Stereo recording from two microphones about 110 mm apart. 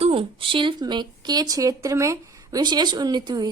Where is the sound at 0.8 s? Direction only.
40° right (ahead or behind).